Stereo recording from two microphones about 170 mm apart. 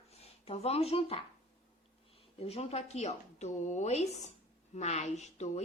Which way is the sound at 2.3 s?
40° left (ahead or behind).